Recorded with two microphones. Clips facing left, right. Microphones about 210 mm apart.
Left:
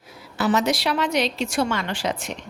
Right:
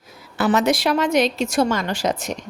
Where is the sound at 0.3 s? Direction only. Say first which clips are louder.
Right 3 dB; 55° right (ahead or behind).